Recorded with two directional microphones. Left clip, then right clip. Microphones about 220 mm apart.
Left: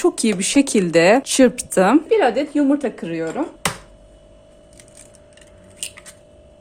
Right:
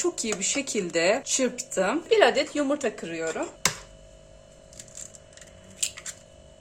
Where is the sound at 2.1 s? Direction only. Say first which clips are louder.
Left 4 dB; 10° left (ahead or behind); by 3.3 s 30° left (ahead or behind).